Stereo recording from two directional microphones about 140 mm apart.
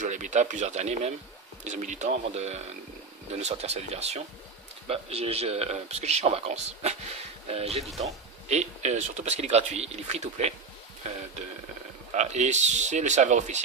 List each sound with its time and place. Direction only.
0.0 s speech: 60° right (ahead or behind)
12.1 s speech: 55° right (ahead or behind)